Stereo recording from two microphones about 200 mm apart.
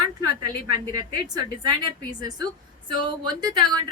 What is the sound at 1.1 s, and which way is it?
Speech, 20° right (ahead or behind).